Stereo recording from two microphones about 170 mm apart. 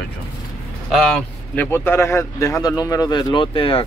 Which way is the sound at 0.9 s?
5° left (ahead or behind).